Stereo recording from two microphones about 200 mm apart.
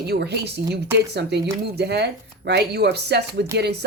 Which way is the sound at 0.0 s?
55° right (ahead or behind).